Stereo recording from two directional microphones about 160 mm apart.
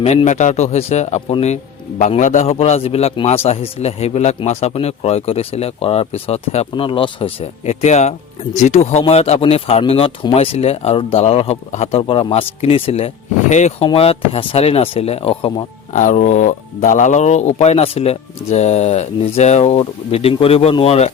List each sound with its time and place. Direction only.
0.0 s a man's voice: 40° left (ahead or behind)
15.9 s speech: 50° left (ahead or behind)